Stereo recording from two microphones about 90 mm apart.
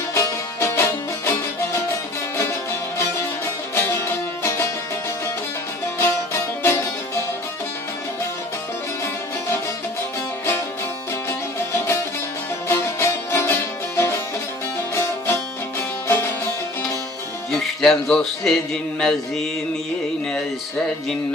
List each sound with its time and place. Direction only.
0.1 s music: 35° left (ahead or behind)
3.8 s music: 30° left (ahead or behind)
6.6 s music: 25° left (ahead or behind)
11.3 s music: 30° left (ahead or behind)
17.5 s music: 5° left (ahead or behind)